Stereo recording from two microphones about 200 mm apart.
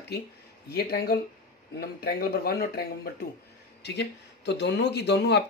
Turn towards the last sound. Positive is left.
turn(degrees=55)  # may be behind; listen again after turning